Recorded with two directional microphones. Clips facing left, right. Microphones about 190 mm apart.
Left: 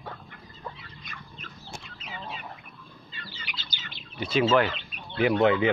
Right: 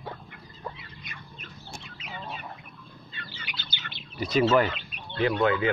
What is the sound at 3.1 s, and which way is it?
Bird, 55° right (ahead or behind).